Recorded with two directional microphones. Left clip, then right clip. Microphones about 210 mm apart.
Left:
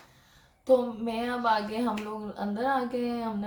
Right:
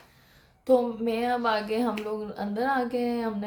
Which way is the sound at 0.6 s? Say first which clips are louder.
Right 1 dB; 40° right (ahead or behind).